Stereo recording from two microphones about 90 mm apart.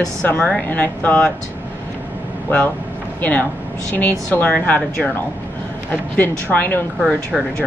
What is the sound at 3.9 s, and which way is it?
A woman's voice, 20° left (ahead or behind).